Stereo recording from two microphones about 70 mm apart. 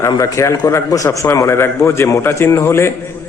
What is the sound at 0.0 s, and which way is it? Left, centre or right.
A man's voice, left.